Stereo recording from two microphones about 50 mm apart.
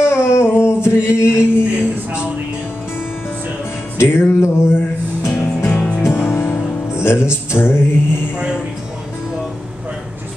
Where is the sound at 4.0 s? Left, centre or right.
Left.